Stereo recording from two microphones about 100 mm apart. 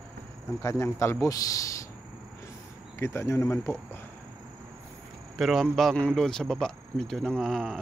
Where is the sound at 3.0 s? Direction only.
30° left (ahead or behind).